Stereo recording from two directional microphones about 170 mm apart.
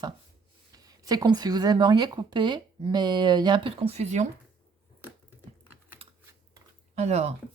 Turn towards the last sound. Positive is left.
turn(degrees=-40)  # may be behind; listen again after turning